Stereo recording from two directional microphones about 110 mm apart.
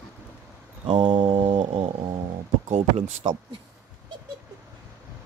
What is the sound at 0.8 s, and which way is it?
Music, 60° right (ahead or behind).